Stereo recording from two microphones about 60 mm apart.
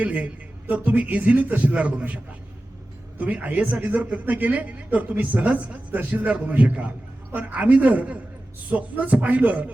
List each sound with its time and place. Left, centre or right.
0.0 s speech: right